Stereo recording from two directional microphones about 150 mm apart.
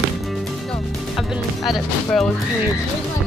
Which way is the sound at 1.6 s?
Centre (ahead or behind).